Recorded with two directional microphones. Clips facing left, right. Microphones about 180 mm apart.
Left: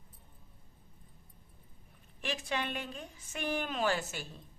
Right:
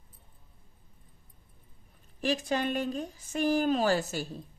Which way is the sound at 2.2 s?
40° right (ahead or behind).